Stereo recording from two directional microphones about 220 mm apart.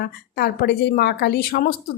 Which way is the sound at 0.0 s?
45° left (ahead or behind).